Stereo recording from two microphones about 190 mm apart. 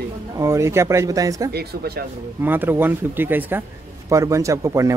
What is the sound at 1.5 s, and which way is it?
Speech, 55° right (ahead or behind).